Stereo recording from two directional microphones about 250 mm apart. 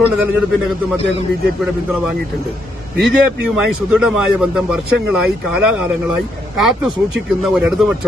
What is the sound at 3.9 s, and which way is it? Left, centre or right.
Speech, centre.